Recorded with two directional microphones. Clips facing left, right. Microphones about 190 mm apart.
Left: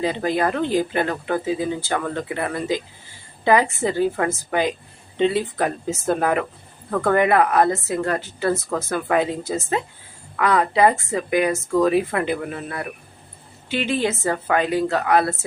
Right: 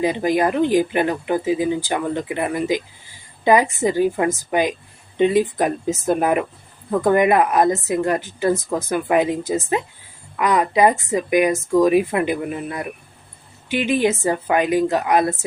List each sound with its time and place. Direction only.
0.0 s speech: 15° right (ahead or behind)